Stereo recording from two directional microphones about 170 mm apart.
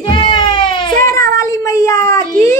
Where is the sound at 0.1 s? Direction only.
25° left (ahead or behind).